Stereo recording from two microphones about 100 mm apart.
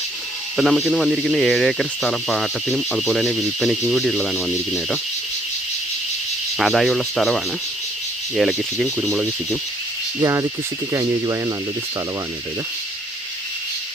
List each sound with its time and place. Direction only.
0.5 s speech: centre (ahead or behind)
6.6 s speech: centre (ahead or behind)
9.0 s speech: 10° left (ahead or behind)
10.2 s speech: 30° right (ahead or behind)